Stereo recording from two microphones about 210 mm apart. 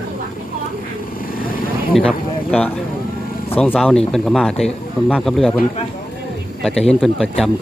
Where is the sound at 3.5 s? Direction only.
5° left (ahead or behind).